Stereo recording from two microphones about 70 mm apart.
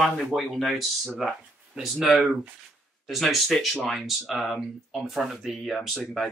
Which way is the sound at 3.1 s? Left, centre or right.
Centre.